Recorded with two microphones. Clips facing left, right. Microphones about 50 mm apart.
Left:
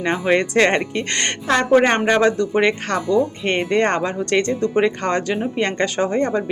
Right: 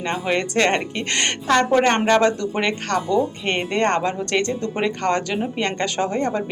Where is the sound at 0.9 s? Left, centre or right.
Centre.